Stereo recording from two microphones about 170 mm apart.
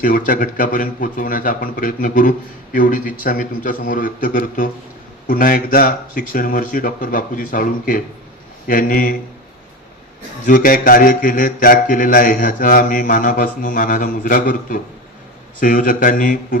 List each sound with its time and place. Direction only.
0.3 s a man's voice: 55° left (ahead or behind)
10.4 s a man's voice: 55° left (ahead or behind)